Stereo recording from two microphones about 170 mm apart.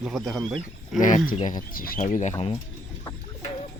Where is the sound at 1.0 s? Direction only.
50° left (ahead or behind).